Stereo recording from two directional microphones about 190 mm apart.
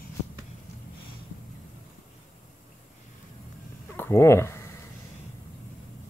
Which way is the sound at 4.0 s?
15° left (ahead or behind).